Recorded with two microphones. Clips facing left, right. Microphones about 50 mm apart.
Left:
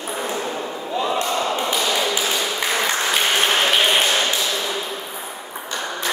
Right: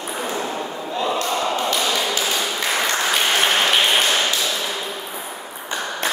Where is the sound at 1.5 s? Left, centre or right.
Centre.